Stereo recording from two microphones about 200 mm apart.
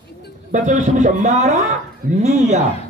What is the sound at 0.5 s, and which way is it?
A man's voice, 40° right (ahead or behind).